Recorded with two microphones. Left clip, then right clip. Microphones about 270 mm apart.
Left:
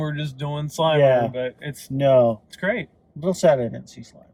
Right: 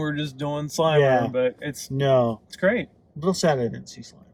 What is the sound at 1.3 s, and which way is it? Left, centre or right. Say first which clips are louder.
Speech: right 4 dB; centre.